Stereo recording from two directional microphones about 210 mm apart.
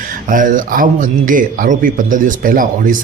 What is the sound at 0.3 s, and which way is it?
Speech, 40° right (ahead or behind).